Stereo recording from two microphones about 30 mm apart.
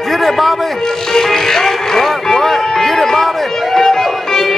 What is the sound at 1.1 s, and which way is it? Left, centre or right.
Music, centre.